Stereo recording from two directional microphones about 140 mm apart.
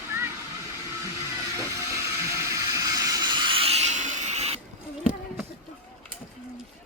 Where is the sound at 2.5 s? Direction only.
25° right (ahead or behind); by 4.5 s 50° right (ahead or behind).